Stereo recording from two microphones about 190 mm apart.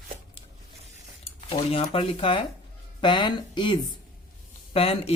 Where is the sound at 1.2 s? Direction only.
30° left (ahead or behind).